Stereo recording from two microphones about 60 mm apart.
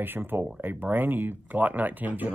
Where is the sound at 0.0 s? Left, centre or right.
Right.